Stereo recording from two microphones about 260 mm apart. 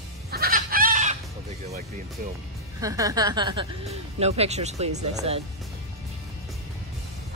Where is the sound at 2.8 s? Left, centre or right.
Centre.